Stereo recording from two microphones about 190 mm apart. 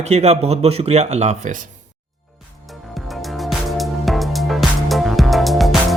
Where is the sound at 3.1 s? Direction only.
Centre (ahead or behind).